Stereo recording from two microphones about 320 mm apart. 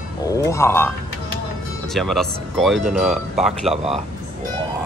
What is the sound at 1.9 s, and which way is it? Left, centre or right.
Speech, centre.